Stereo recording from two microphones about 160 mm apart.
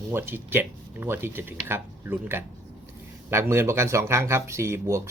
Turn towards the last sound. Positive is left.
turn(degrees=-15)  # may be behind; listen again after turning